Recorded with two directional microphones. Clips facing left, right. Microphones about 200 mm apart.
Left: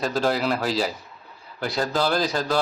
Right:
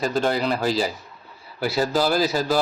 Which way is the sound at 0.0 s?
Centre (ahead or behind).